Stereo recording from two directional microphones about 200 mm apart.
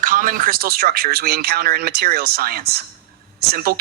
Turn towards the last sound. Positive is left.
turn(degrees=-50)  # may be behind; listen again after turning